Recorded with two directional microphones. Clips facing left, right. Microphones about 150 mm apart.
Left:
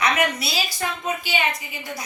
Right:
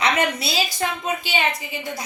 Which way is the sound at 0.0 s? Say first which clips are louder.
Right 1 dB; 25° right (ahead or behind).